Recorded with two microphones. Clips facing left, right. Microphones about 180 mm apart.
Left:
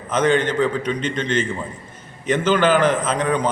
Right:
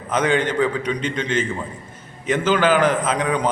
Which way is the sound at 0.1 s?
10° right (ahead or behind).